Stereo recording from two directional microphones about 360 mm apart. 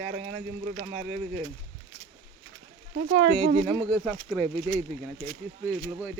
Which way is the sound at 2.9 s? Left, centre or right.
Right.